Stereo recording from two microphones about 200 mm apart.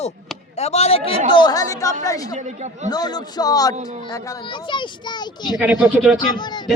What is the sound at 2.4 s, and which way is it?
Speech, 35° right (ahead or behind).